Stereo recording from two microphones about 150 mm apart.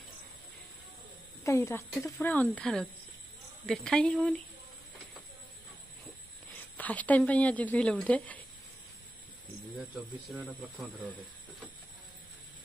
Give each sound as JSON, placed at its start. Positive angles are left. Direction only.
{"t": 1.4, "sound": "speech", "side_deg": 20}
{"t": 6.5, "sound": "a woman's voice", "side_deg": 10}
{"t": 9.8, "sound": "speech", "side_deg": 0}